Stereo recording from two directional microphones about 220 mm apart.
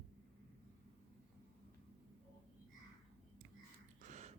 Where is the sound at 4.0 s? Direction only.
30° right (ahead or behind).